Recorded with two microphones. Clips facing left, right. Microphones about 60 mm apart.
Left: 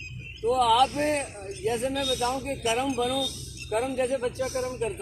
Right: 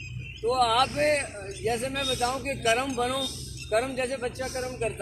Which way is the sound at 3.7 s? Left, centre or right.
Right.